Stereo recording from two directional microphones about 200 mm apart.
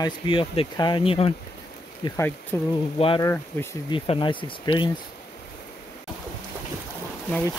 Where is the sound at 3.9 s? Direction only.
25° left (ahead or behind).